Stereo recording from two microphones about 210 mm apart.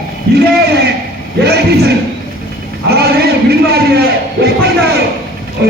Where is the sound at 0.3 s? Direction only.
50° right (ahead or behind).